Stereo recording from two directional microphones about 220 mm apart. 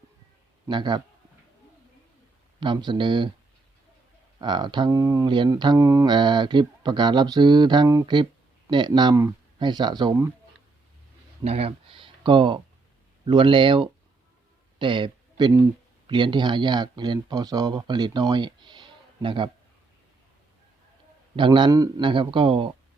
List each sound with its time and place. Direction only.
0.7 s speech: 20° right (ahead or behind)
2.6 s speech: 20° right (ahead or behind)
4.4 s speech: 20° right (ahead or behind)
11.4 s speech: 25° right (ahead or behind)
21.3 s speech: 20° right (ahead or behind)